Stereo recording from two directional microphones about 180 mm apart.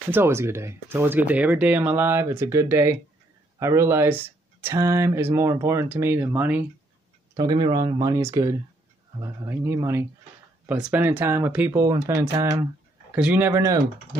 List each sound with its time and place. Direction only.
0.1 s speech: 15° right (ahead or behind)
7.3 s speech: 25° right (ahead or behind)